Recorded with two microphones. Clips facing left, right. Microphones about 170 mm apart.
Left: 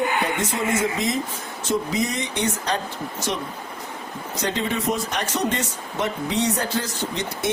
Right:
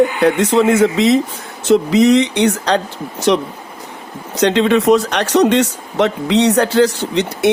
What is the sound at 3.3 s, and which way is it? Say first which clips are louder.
Speech: right 16 dB; 90° right.